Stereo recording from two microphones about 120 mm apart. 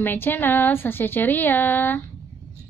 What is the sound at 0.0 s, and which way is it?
Speech, 15° left (ahead or behind).